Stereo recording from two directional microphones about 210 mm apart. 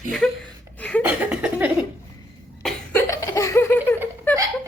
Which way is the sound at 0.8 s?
5° left (ahead or behind).